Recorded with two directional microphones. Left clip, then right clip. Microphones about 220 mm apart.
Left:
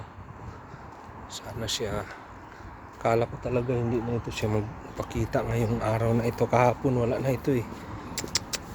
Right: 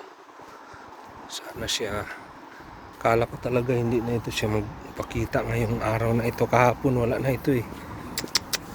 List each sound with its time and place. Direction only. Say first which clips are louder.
1.3 s speech: right 3 dB; 15° left (ahead or behind)
3.4 s speech: right 3 dB; 5° right (ahead or behind)
4.4 s speech: right 2 dB; 15° left (ahead or behind)
8.1 s vehicle: right 4 dB; centre (ahead or behind)